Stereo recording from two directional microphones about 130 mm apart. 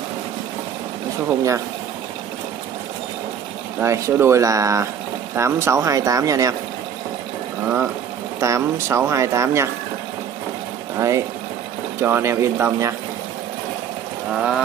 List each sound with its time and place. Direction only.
3.8 s speech: 20° right (ahead or behind)
7.6 s speech: 15° right (ahead or behind)
11.0 s speech: 25° right (ahead or behind)
14.3 s speech: 5° right (ahead or behind)